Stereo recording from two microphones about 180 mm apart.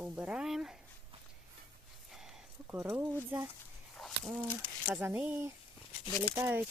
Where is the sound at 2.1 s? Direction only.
Centre (ahead or behind).